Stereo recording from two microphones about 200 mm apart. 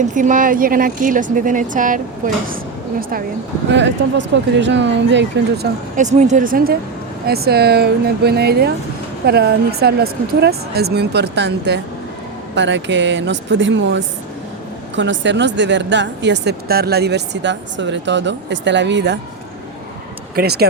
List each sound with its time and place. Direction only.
0.0 s a woman's voice: 40° right (ahead or behind)
3.7 s speech: 65° right (ahead or behind)
6.0 s a woman's voice: 35° right (ahead or behind); by 19.2 s 60° right (ahead or behind)
20.3 s speech: 50° right (ahead or behind)